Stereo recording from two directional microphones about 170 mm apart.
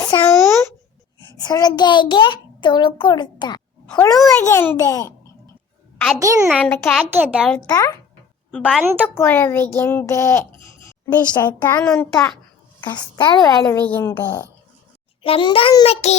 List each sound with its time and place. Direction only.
0.0 s a sound: 25° left (ahead or behind)
1.4 s a child's voice: 20° left (ahead or behind)
4.1 s a child's voice: centre (ahead or behind)
4.4 s a child's voice: 15° left (ahead or behind)
6.1 s a child's voice: 20° right (ahead or behind)
6.5 s a child's voice: 10° left (ahead or behind)
7.1 s a child's voice: 5° right (ahead or behind)
7.7 s a child's voice: 20° left (ahead or behind)
8.4 s a woman's voice: 5° left (ahead or behind)
12.8 s a child's voice: 25° left (ahead or behind)
13.7 s a child's voice: 10° left (ahead or behind)
15.2 s a child's voice: 30° left (ahead or behind)
15.9 s child singing: 40° left (ahead or behind)